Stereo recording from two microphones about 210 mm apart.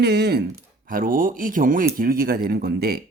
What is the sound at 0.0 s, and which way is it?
Speech, 50° right (ahead or behind).